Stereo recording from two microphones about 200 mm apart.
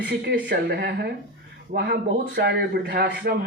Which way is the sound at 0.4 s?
55° right (ahead or behind).